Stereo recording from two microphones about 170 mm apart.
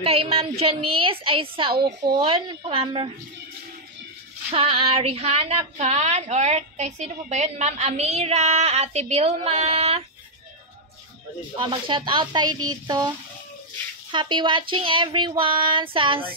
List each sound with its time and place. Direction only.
0.0 s a woman's voice: 35° right (ahead or behind)
4.5 s a woman's voice: 35° right (ahead or behind)
11.5 s speech: 30° right (ahead or behind)
14.1 s speech: 30° right (ahead or behind)